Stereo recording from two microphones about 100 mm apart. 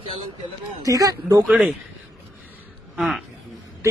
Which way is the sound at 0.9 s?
35° right (ahead or behind).